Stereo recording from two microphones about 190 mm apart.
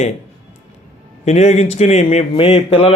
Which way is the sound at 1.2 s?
35° left (ahead or behind).